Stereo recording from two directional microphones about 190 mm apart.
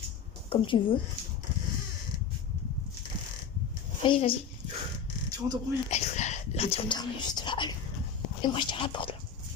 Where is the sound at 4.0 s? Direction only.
30° left (ahead or behind).